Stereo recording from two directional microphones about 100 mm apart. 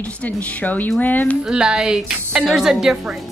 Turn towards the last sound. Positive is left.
turn(degrees=-5)  # may be behind; listen again after turning